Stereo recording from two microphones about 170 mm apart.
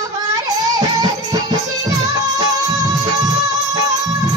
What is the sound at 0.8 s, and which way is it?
Music, 25° right (ahead or behind).